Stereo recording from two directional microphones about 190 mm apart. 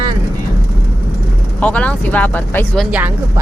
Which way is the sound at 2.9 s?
10° right (ahead or behind).